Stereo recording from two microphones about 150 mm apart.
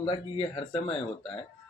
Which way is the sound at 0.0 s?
35° left (ahead or behind).